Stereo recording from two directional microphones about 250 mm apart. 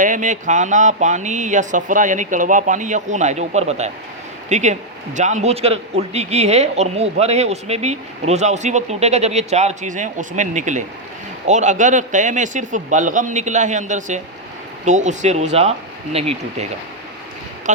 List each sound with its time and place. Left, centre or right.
0.0 s a man's voice: right